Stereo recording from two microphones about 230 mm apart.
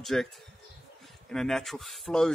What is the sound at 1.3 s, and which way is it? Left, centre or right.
Speech, centre.